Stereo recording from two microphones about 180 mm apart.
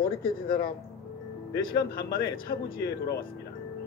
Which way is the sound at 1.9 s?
55° left (ahead or behind).